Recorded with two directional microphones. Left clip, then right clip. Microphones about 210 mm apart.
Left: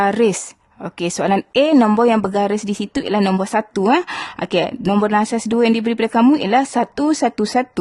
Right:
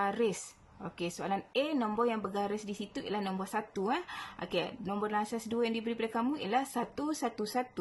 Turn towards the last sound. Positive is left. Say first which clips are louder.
# left 16 dB
turn(degrees=45)  # may be behind; listen again after turning